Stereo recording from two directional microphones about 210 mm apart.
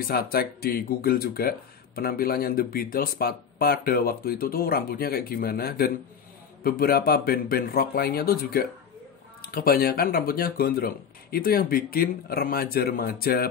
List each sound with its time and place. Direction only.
0.0 s speech: 45° left (ahead or behind)